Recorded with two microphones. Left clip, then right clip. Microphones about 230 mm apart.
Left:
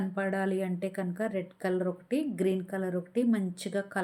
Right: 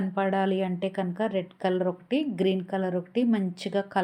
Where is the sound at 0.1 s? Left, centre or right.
Centre.